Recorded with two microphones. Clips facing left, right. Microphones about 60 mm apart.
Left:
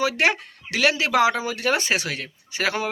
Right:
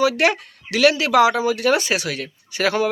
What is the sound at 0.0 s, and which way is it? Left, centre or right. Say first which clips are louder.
Speech: right 4 dB; left.